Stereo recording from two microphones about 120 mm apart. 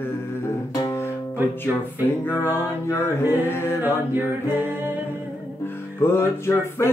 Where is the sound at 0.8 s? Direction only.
20° left (ahead or behind).